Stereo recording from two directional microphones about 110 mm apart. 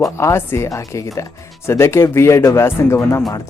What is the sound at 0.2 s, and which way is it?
Speech, 25° left (ahead or behind).